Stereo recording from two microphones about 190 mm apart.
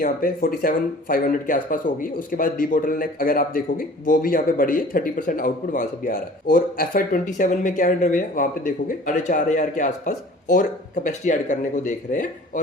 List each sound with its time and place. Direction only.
0.0 s speech: 50° left (ahead or behind)